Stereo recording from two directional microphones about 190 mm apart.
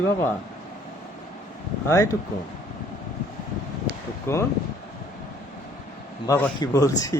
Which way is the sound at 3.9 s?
60° right (ahead or behind).